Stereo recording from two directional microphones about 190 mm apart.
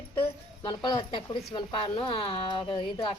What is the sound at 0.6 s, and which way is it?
A woman's voice, 25° left (ahead or behind).